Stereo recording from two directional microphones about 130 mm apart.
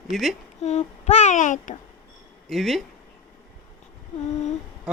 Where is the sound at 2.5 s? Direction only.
Centre (ahead or behind).